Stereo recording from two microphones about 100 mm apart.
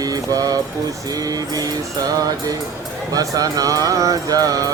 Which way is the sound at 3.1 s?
35° right (ahead or behind).